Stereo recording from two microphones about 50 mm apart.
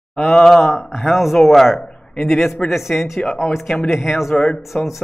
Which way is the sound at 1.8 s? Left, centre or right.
Centre.